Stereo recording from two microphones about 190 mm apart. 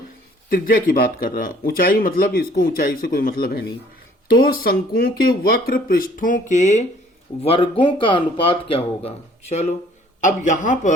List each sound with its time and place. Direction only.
0.5 s a man's voice: 50° left (ahead or behind)